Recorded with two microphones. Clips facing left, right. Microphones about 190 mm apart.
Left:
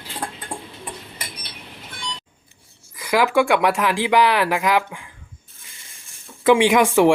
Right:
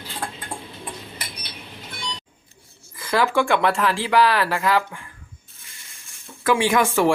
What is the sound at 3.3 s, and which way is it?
Speech, 10° left (ahead or behind).